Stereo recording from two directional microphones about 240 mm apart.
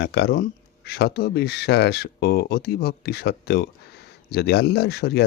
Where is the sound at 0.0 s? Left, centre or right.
Left.